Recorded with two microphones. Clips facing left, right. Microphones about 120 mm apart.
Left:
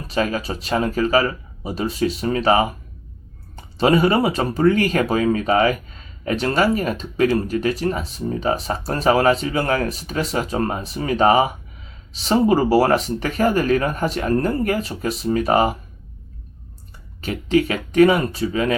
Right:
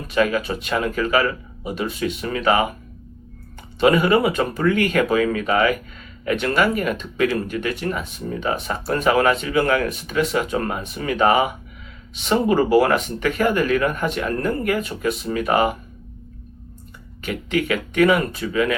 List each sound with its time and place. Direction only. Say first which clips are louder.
0.1 s speech: right 2 dB; 30° left (ahead or behind)
3.8 s speech: even; 35° left (ahead or behind)
17.2 s speech: left 3 dB; 35° left (ahead or behind)